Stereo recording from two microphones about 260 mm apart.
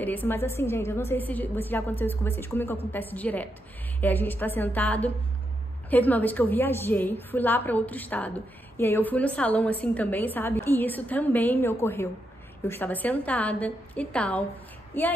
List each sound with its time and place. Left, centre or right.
0.0 s a woman's voice: centre